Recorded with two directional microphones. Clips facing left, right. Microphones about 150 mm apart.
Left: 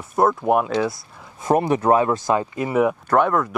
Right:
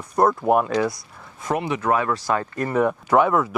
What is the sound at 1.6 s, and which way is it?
Speech, 45° left (ahead or behind).